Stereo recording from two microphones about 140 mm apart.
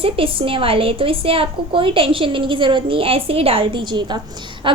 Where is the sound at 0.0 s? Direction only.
40° right (ahead or behind).